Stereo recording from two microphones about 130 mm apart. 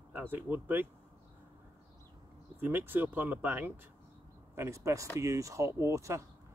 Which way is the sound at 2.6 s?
15° right (ahead or behind).